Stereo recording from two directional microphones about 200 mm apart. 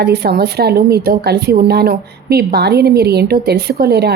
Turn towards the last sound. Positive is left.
turn(degrees=-55)  # may be behind; listen again after turning